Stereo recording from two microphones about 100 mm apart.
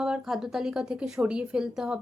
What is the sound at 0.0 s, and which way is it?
A woman's voice, 5° right (ahead or behind).